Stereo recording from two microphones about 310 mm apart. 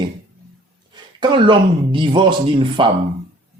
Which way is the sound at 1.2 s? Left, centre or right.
Centre.